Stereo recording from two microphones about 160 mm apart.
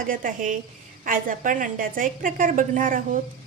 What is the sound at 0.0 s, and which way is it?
A woman's voice, 55° right (ahead or behind).